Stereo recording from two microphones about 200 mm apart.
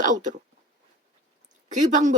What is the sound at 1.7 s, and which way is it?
Speech, 35° right (ahead or behind).